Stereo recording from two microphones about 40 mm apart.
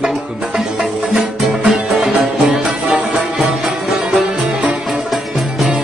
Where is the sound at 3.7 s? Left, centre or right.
Centre.